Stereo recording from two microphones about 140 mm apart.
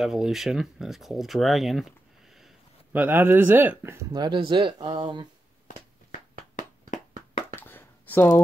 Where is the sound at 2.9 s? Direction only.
15° right (ahead or behind).